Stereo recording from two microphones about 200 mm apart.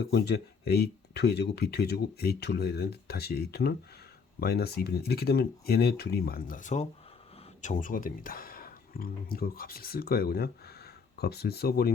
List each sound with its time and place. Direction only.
0.0 s speech: 55° left (ahead or behind)